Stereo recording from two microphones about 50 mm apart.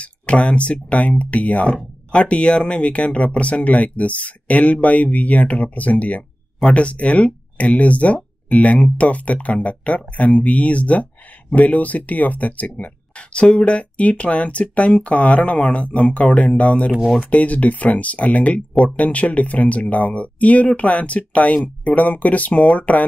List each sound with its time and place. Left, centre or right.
0.0 s speech: left